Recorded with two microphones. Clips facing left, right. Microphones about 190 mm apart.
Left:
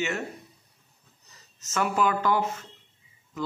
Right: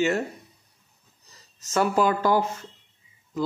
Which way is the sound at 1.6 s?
35° right (ahead or behind).